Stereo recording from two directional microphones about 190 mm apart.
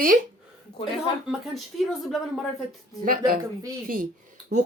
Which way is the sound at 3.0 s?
50° right (ahead or behind).